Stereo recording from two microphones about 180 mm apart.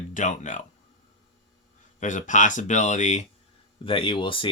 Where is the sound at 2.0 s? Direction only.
45° left (ahead or behind).